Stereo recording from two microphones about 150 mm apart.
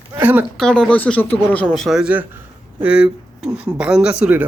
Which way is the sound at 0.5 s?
5° left (ahead or behind).